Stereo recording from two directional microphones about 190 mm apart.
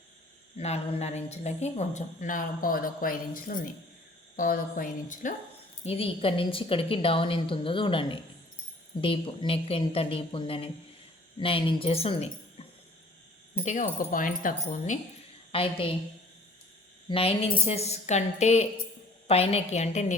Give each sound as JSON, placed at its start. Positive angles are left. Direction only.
{"t": 0.5, "sound": "a woman's voice", "side_deg": 35}
{"t": 5.8, "sound": "a woman's voice", "side_deg": 30}
{"t": 13.7, "sound": "speech", "side_deg": 40}
{"t": 15.5, "sound": "a woman's voice", "side_deg": 30}
{"t": 17.1, "sound": "a woman's voice", "side_deg": 30}